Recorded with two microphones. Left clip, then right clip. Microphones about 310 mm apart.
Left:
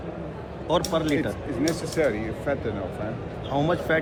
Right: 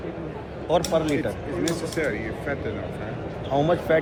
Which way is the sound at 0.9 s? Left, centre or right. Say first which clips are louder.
Right 1 dB; centre.